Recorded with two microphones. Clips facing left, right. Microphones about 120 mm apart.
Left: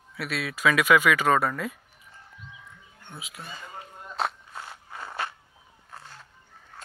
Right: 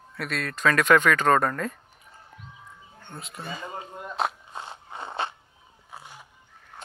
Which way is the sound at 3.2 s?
5° left (ahead or behind).